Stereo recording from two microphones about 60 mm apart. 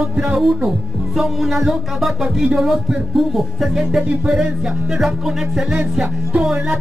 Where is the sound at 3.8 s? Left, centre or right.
Centre.